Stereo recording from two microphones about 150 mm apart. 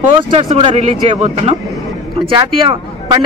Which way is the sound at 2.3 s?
35° right (ahead or behind).